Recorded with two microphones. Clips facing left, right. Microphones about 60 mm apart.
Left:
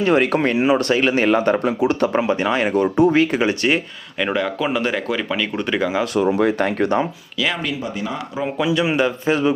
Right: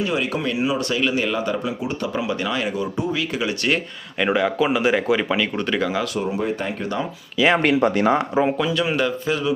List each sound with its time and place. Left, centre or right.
0.0 s speech: left
2.1 s speech: left
2.7 s speech: left
3.2 s speech: left
4.2 s speech: centre
5.5 s speech: centre
6.1 s speech: left
6.8 s speech: left
7.6 s speech: right
8.4 s speech: right
8.7 s a man's voice: centre
9.3 s speech: left